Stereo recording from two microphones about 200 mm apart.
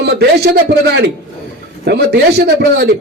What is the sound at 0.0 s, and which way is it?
A man's voice, 55° right (ahead or behind).